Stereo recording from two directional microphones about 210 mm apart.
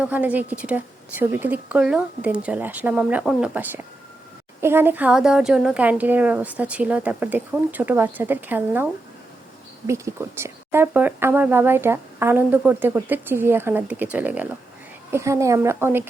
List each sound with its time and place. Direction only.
0.0 s speech: 5° right (ahead or behind)